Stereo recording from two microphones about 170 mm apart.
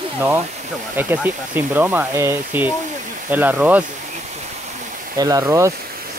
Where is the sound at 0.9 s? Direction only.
10° right (ahead or behind).